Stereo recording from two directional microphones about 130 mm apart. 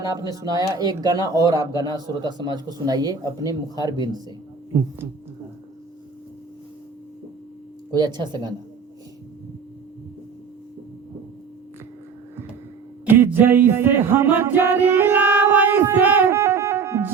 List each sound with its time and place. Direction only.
0.0 s speech: 25° right (ahead or behind)
7.9 s speech: 35° right (ahead or behind)
13.1 s music: 15° right (ahead or behind)